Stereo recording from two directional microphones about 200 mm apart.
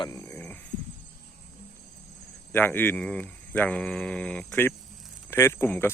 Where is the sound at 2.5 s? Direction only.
10° left (ahead or behind).